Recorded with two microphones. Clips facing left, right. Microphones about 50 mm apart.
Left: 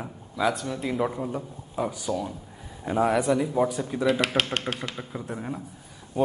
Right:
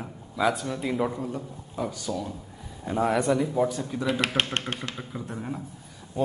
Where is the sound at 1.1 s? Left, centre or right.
Centre.